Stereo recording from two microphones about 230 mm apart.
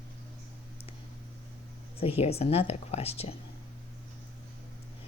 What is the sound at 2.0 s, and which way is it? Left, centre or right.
A woman's voice, left.